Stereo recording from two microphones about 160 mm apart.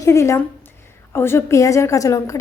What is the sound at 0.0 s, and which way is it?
A woman's voice, 20° left (ahead or behind).